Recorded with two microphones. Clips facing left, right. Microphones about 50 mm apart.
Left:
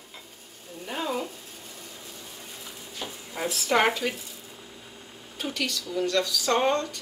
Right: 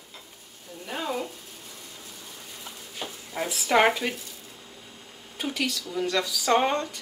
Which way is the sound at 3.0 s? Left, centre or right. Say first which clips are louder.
Even; centre.